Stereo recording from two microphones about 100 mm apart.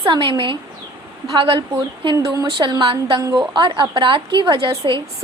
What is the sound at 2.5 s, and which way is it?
A woman's voice, 50° right (ahead or behind).